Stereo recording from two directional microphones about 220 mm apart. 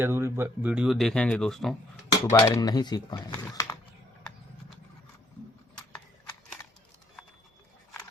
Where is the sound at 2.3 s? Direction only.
15° left (ahead or behind).